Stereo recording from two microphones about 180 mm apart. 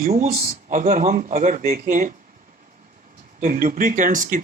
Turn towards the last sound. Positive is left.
turn(degrees=-50)  # may be behind; listen again after turning